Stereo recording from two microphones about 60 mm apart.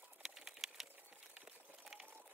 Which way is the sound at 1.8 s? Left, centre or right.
Centre.